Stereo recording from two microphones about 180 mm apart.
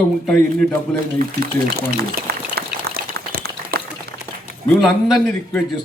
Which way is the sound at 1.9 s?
60° right (ahead or behind).